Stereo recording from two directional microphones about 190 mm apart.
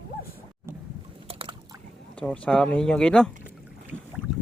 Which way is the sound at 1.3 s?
30° right (ahead or behind).